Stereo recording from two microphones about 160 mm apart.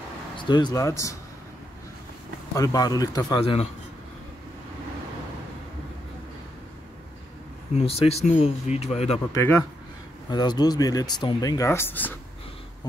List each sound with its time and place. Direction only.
0.4 s speech: 30° left (ahead or behind)
2.5 s speech: 20° left (ahead or behind)
7.7 s speech: 40° left (ahead or behind)
9.3 s speech: 15° left (ahead or behind)
10.3 s speech: 25° left (ahead or behind)